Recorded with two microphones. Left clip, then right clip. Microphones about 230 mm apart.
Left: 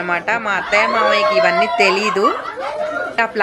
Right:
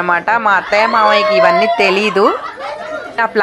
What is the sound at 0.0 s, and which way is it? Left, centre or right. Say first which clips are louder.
Speech: right 6 dB; centre.